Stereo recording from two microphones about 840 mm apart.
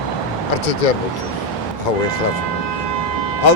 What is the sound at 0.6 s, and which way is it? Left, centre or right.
Speech, left.